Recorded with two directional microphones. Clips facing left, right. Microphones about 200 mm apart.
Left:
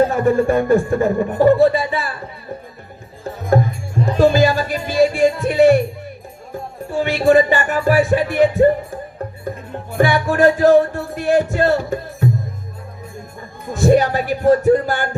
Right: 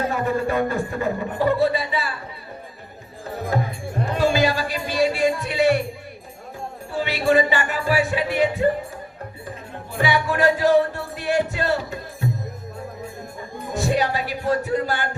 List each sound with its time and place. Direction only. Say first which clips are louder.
0.1 s a man's voice: left 7 dB; 45° left (ahead or behind)
4.2 s music: left 6 dB; 45° left (ahead or behind)
6.9 s a man's voice: left 6 dB; 45° left (ahead or behind)
10.0 s a man's voice: left 6 dB; 45° left (ahead or behind)
13.7 s a man's voice: left 8 dB; 45° left (ahead or behind)